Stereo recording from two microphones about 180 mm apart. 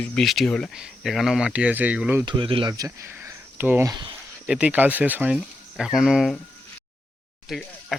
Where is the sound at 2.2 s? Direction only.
25° right (ahead or behind); by 6.4 s centre (ahead or behind).